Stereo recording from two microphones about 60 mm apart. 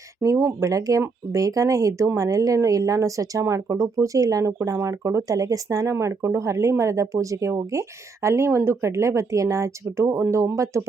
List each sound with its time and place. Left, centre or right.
0.2 s speech: right
0.6 s speech: right